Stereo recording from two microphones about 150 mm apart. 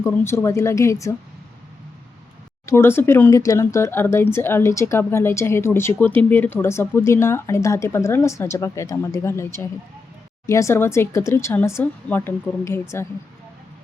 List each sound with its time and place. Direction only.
0.0 s speech: 15° left (ahead or behind)
2.6 s speech: 15° left (ahead or behind)